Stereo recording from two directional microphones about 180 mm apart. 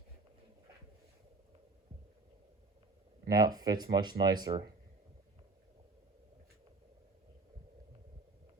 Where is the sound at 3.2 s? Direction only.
20° right (ahead or behind).